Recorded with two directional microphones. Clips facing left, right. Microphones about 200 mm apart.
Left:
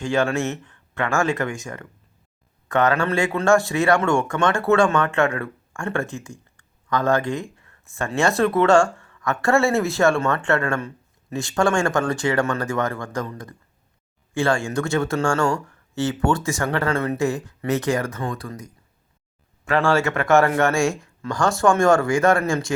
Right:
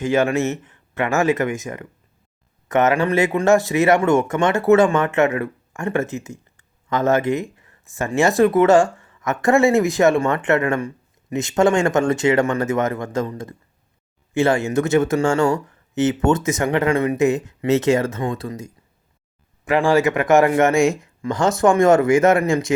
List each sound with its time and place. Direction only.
0.0 s speech: 20° right (ahead or behind)